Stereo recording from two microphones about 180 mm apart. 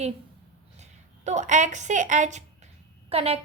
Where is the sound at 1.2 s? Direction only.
40° right (ahead or behind).